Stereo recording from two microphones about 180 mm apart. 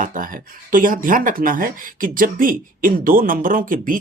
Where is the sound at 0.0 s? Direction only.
50° right (ahead or behind).